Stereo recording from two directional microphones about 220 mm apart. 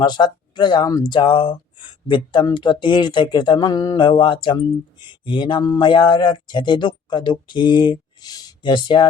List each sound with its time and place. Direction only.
0.0 s speech: 20° left (ahead or behind)